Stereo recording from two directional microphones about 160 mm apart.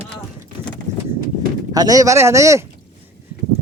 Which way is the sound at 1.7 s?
25° right (ahead or behind).